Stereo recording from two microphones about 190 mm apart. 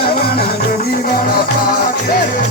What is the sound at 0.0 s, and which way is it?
Music, 55° left (ahead or behind).